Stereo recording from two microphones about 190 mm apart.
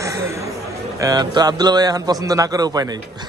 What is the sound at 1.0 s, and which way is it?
A man's voice, 20° right (ahead or behind).